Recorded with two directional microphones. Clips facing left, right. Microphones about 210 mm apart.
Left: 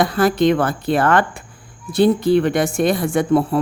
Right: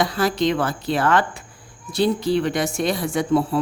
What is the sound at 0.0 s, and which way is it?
A woman's voice, 55° left (ahead or behind).